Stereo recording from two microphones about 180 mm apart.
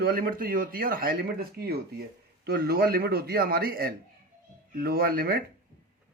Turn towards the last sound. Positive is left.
turn(degrees=-55)  # may be behind; listen again after turning